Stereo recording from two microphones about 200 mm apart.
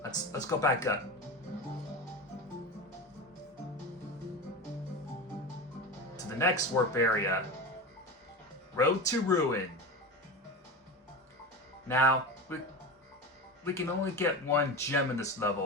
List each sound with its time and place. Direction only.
0.0 s speech: 15° left (ahead or behind)
6.1 s speech: 15° left (ahead or behind)
8.7 s speech: 15° left (ahead or behind)
11.9 s speech: 10° left (ahead or behind)
13.7 s speech: 10° left (ahead or behind)